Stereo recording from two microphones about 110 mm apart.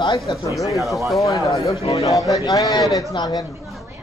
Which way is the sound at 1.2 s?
30° left (ahead or behind).